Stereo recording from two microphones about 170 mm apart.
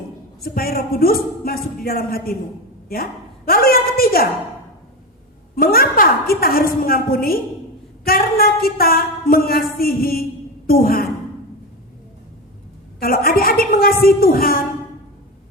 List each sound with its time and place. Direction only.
0.4 s a woman's voice: 60° left (ahead or behind)
5.5 s a woman's voice: 60° left (ahead or behind)
13.0 s speech: 60° left (ahead or behind)